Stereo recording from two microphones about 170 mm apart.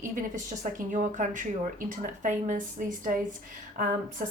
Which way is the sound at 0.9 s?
50° right (ahead or behind).